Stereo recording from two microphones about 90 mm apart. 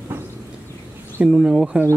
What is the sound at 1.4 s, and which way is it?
Speech, 10° right (ahead or behind).